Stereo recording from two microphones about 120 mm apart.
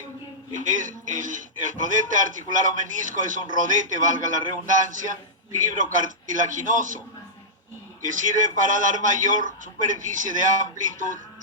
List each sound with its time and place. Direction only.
0.6 s speech: 90° right
8.0 s speech: 90° right